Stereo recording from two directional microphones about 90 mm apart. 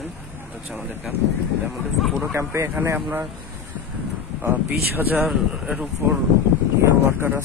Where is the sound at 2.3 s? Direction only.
30° right (ahead or behind).